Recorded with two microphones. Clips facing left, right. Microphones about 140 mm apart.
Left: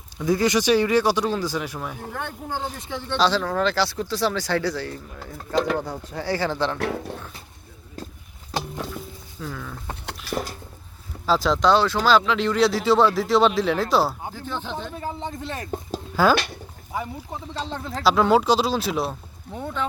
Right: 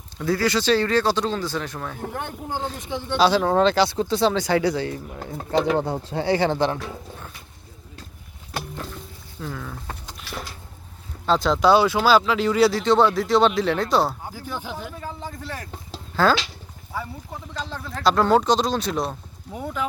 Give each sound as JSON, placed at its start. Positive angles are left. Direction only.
{"t": 0.2, "sound": "speech", "side_deg": 15}
{"t": 2.1, "sound": "speech", "side_deg": -15}
{"t": 3.4, "sound": "a man's voice", "side_deg": -25}
{"t": 5.5, "sound": "speech", "side_deg": 0}
{"t": 5.8, "sound": "a man's voice", "side_deg": -25}
{"t": 6.7, "sound": "speech", "side_deg": 75}
{"t": 9.4, "sound": "speech", "side_deg": -5}
{"t": 10.2, "sound": "a sound", "side_deg": 45}
{"t": 11.3, "sound": "speech", "side_deg": 0}
{"t": 14.3, "sound": "speech", "side_deg": -10}
{"t": 15.0, "sound": "speech", "side_deg": 20}
{"t": 16.2, "sound": "speech", "side_deg": 10}
{"t": 18.0, "sound": "speech", "side_deg": 5}
{"t": 19.5, "sound": "speech", "side_deg": -10}